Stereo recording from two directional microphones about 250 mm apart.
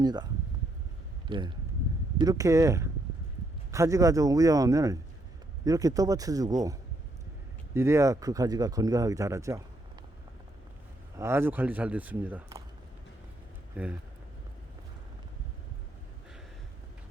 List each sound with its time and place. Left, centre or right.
0.0 s speech: centre
1.3 s speech: centre
11.2 s speech: centre
13.7 s speech: centre